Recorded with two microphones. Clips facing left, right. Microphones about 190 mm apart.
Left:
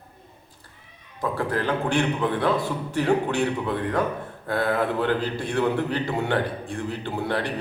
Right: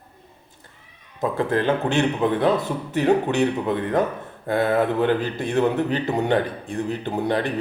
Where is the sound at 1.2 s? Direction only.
20° right (ahead or behind).